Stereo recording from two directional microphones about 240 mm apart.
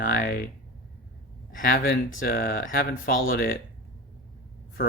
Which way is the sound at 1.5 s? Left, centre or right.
Left.